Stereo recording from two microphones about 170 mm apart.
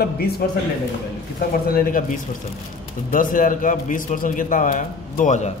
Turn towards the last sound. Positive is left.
turn(degrees=45)  # may be behind; listen again after turning